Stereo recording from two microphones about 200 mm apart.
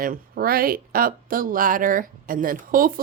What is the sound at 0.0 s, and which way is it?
A woman's voice, 45° right (ahead or behind).